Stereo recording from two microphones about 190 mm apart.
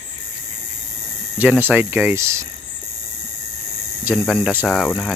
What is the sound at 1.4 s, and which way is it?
Speech, 10° right (ahead or behind).